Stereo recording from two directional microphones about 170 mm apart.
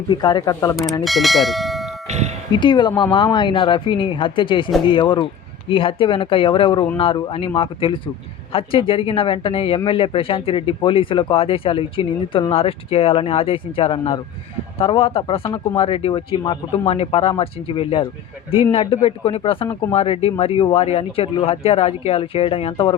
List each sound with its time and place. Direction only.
0.1 s speech: 25° left (ahead or behind)
1.0 s speech: centre (ahead or behind)
2.0 s music: 40° right (ahead or behind)
2.6 s speech: 25° left (ahead or behind)